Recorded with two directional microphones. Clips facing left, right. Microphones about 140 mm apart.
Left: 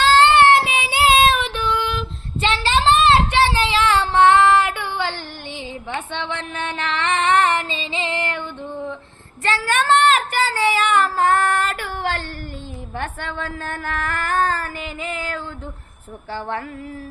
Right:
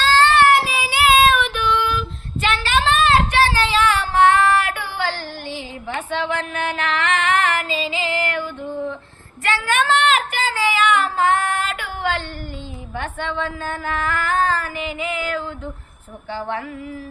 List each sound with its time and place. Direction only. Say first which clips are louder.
0.0 s child singing: left 2 dB; 20° left (ahead or behind)
6.2 s female singing: right 4 dB; 30° left (ahead or behind)
9.4 s child singing: even; 35° left (ahead or behind)
14.0 s a sound: even; 50° left (ahead or behind)